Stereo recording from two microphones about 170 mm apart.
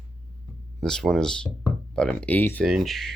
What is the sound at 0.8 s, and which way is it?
Speech, 5° left (ahead or behind).